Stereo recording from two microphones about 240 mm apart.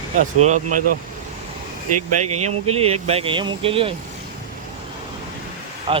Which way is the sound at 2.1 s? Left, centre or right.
Right.